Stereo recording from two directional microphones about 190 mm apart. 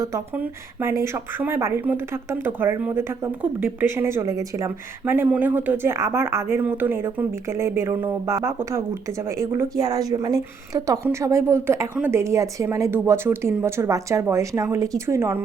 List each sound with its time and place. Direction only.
0.0 s speech: 15° right (ahead or behind)